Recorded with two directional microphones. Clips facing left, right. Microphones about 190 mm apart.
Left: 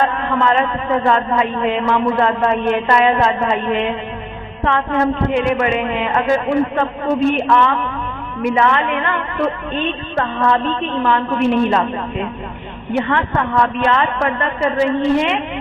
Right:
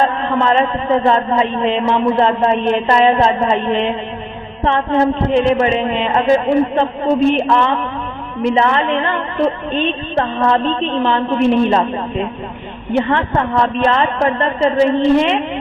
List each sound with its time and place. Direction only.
0.0 s a man's voice: 30° right (ahead or behind)
12.9 s a woman's voice: 30° right (ahead or behind)